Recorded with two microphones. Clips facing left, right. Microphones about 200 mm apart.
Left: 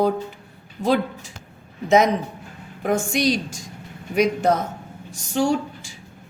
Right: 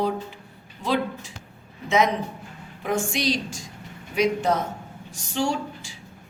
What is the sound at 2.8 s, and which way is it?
A woman's voice, 45° left (ahead or behind).